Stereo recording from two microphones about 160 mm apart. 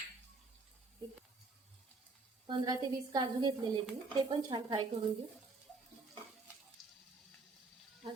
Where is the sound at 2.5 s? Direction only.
25° right (ahead or behind).